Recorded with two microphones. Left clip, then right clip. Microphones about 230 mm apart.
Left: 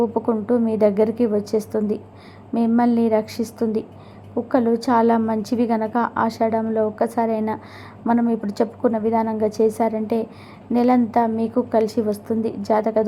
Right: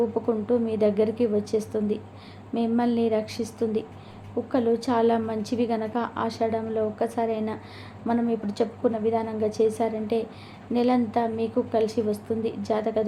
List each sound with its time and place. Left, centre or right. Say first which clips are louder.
0.1 s a woman's voice: left 4 dB; left